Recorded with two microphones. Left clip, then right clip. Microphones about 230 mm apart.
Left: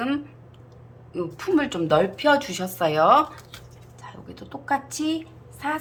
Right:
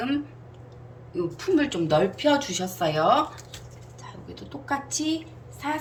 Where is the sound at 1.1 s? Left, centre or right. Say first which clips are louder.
Left 1 dB; centre.